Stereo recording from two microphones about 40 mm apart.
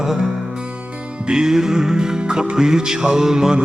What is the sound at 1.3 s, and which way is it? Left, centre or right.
Music, centre.